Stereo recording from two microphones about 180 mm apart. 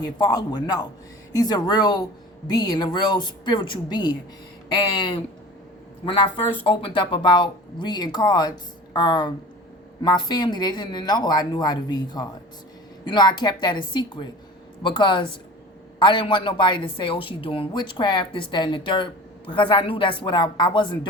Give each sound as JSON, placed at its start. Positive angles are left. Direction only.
{"t": 0.0, "sound": "a woman's voice", "side_deg": 20}